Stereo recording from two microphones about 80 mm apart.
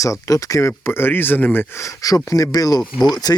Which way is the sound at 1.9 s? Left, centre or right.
Left.